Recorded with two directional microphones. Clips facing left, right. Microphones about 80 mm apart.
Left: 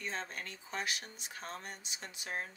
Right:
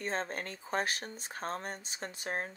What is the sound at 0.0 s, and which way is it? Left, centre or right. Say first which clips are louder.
Speech: right 6 dB; right.